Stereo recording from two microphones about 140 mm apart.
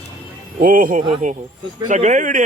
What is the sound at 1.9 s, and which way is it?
Speech, 60° right (ahead or behind).